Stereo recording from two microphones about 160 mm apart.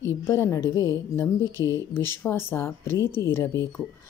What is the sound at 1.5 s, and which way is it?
Speech, 25° right (ahead or behind).